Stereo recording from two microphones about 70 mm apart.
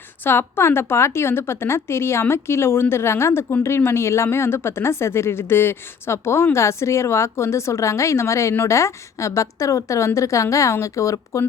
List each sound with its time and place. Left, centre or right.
0.3 s a woman's voice: left